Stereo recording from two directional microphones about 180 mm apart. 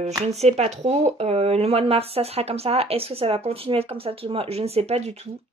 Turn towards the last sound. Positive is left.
turn(degrees=-35)  # may be behind; listen again after turning